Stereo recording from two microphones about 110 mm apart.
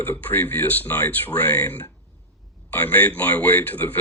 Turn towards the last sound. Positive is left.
turn(degrees=15)  # may be behind; listen again after turning